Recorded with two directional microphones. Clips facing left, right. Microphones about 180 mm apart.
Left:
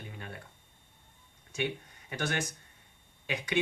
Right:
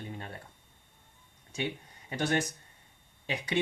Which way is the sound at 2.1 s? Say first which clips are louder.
Right 4 dB; 35° right (ahead or behind).